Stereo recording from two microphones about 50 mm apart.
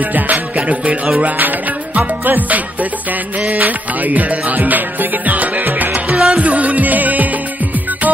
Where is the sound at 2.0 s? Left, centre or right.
Right.